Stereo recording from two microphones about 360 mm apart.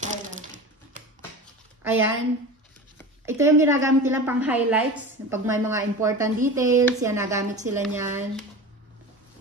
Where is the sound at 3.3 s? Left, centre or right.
Centre.